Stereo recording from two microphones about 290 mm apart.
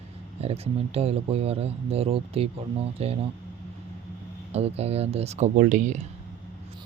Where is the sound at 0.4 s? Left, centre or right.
Right.